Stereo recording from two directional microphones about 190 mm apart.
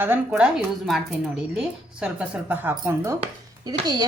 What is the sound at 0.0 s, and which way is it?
A woman's voice, 10° right (ahead or behind).